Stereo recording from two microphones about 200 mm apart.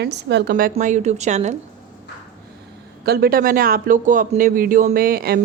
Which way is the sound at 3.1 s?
50° right (ahead or behind).